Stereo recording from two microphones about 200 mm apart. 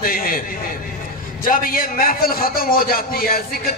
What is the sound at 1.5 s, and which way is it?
A man's voice, 45° left (ahead or behind).